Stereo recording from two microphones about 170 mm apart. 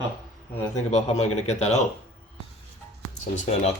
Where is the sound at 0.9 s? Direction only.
40° left (ahead or behind).